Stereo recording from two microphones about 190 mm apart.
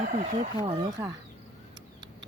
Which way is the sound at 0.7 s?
20° right (ahead or behind).